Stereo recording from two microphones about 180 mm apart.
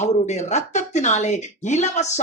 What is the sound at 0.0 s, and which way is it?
Speech, 40° left (ahead or behind).